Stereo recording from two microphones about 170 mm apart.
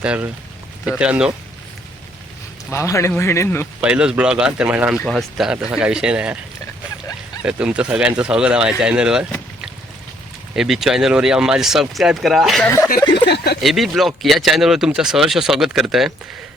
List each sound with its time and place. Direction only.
0.0 s speech: 5° right (ahead or behind)
2.6 s speech: 15° left (ahead or behind)
3.8 s speech: 5° right (ahead or behind)
7.4 s speech: 5° right (ahead or behind)
10.5 s speech: centre (ahead or behind)
12.6 s speech: 10° left (ahead or behind)
13.2 s speech: 75° left (ahead or behind)
13.6 s speech: centre (ahead or behind)